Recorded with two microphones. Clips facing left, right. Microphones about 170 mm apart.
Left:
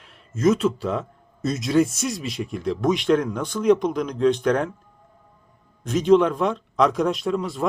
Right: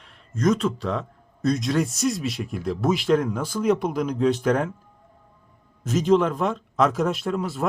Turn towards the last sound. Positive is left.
turn(degrees=-5)  # may be behind; listen again after turning